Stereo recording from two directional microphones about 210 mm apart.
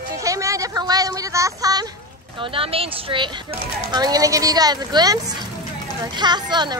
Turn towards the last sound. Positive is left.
turn(degrees=-20)  # may be behind; listen again after turning